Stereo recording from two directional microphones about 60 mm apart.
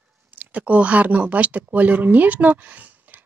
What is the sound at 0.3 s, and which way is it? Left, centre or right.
Speech, right.